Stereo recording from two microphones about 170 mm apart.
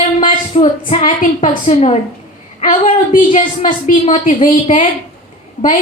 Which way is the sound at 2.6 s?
55° left (ahead or behind).